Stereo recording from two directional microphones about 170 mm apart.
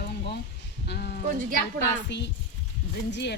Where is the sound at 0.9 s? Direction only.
70° left (ahead or behind).